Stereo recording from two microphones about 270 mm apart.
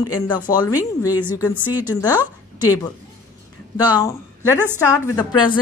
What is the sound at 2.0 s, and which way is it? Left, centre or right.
Speech, centre.